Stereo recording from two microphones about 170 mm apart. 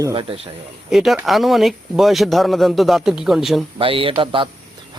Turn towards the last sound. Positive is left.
turn(degrees=-30)  # may be behind; listen again after turning